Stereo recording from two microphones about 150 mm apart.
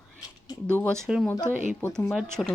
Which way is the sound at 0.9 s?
5° right (ahead or behind).